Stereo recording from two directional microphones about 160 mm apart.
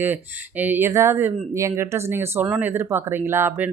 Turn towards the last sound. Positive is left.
turn(degrees=-15)  # may be behind; listen again after turning